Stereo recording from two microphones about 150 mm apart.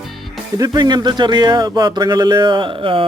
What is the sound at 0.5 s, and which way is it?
Speech, 25° right (ahead or behind).